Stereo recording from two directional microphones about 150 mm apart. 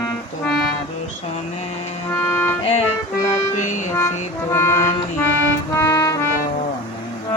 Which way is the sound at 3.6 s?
55° left (ahead or behind).